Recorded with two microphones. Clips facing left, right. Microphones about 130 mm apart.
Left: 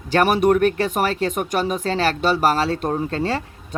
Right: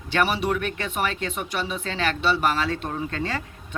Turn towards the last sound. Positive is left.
turn(degrees=30)  # may be behind; listen again after turning